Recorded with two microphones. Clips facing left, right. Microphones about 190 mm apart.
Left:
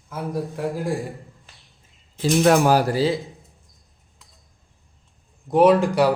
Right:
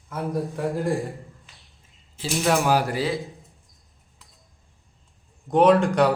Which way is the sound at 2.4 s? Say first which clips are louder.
Left 4 dB; 45° left (ahead or behind).